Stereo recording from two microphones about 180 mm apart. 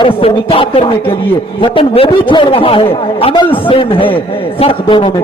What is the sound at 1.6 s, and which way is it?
A man's voice, 30° left (ahead or behind).